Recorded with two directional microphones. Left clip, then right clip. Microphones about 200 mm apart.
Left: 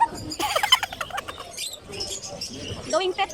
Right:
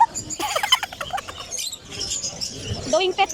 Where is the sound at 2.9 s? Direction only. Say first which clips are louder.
Right 4 dB; 15° right (ahead or behind).